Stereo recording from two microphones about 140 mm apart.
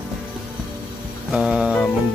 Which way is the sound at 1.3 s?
5° right (ahead or behind).